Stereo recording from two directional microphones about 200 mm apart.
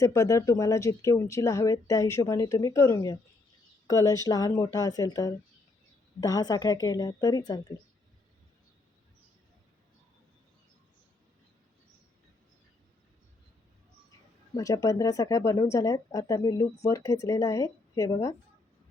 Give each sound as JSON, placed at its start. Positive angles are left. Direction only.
{"t": 0.0, "sound": "a woman's voice", "side_deg": 15}
{"t": 14.5, "sound": "speech", "side_deg": 15}